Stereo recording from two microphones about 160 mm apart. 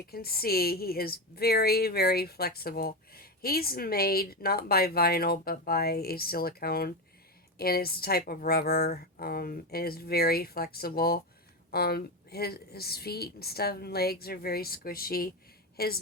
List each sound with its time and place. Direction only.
0.1 s speech: 70° left (ahead or behind)